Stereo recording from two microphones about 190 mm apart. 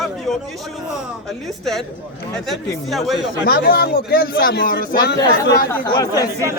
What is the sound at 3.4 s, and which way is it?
Speech, 55° left (ahead or behind).